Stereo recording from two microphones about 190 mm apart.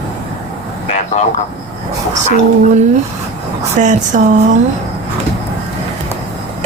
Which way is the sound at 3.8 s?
40° right (ahead or behind).